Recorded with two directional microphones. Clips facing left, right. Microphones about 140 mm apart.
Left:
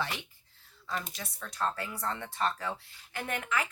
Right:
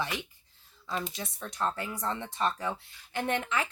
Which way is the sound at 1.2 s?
25° right (ahead or behind).